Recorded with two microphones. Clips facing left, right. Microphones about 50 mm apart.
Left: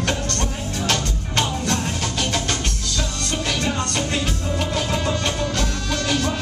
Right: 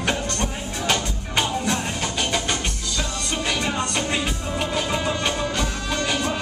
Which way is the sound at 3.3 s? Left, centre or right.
Centre.